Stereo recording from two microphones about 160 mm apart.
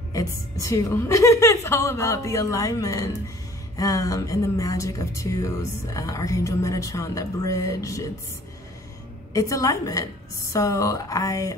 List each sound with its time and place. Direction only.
0.6 s speech: 20° left (ahead or behind)
9.3 s speech: 20° left (ahead or behind)